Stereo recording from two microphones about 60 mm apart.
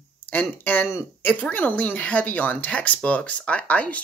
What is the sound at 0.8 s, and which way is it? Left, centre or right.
Speech, left.